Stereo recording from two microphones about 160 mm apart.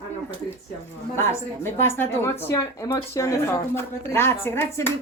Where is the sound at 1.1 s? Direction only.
15° left (ahead or behind).